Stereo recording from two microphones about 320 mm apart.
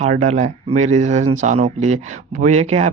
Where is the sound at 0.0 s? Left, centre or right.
Right.